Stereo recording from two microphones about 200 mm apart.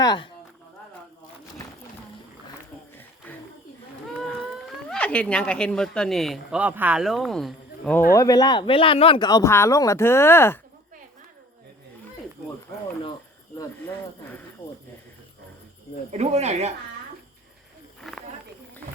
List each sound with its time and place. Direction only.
0.0 s speech: 20° left (ahead or behind)
4.9 s speech: 5° left (ahead or behind)
8.1 s speech: 15° left (ahead or behind)
16.1 s speech: 35° right (ahead or behind)
18.0 s a sound: centre (ahead or behind)